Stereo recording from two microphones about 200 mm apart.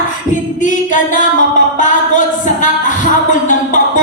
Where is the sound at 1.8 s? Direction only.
40° left (ahead or behind).